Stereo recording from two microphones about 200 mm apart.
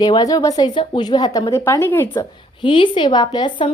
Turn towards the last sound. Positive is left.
turn(degrees=20)  # may be behind; listen again after turning